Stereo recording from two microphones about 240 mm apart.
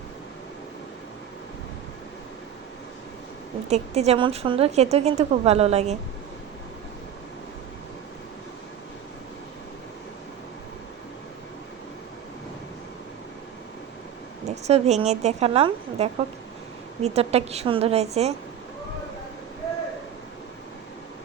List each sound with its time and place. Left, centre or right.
3.7 s a woman's voice: right
14.4 s a woman's voice: right